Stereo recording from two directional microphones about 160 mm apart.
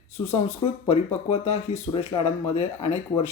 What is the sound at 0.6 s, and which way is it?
Speech, 40° left (ahead or behind).